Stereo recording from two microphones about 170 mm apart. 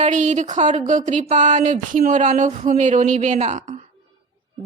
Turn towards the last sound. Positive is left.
turn(degrees=-45)  # may be behind; listen again after turning